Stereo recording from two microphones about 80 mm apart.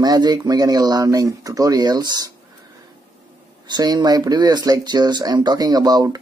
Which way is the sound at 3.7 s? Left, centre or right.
Right.